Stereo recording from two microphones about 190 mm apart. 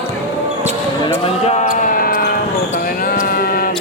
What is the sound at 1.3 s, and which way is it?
Basketball bounce, 35° left (ahead or behind).